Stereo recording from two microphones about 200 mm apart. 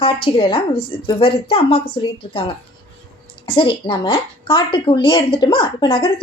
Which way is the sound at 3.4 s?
25° left (ahead or behind).